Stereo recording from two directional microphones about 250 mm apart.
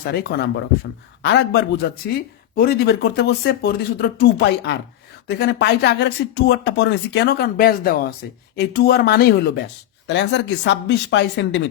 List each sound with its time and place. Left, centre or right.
0.1 s speech: left